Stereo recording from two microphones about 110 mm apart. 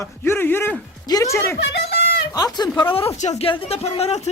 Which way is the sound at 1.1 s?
40° left (ahead or behind).